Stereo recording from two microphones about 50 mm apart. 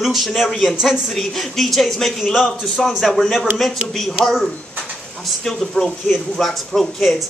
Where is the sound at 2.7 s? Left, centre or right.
Centre.